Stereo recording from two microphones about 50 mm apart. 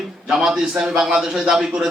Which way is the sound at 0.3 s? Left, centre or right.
Centre.